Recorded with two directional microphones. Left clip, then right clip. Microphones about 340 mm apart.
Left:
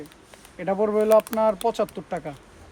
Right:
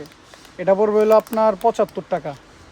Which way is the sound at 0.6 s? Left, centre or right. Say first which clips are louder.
Right 6 dB; centre.